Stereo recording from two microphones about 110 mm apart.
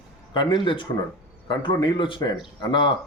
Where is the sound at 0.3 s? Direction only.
45° left (ahead or behind).